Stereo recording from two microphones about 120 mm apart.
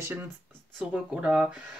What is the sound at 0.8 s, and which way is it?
Speech, 10° right (ahead or behind).